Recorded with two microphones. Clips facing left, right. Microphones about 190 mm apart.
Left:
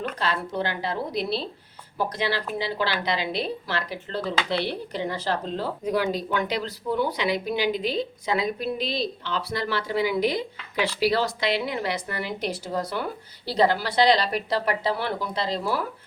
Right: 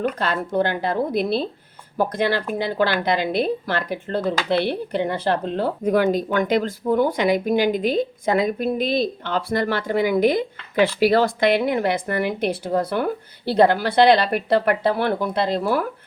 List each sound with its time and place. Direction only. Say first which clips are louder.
0.2 s a woman's voice: right 6 dB; 50° right (ahead or behind)